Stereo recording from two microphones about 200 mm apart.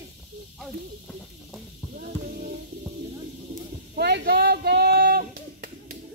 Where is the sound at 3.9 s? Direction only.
55° right (ahead or behind).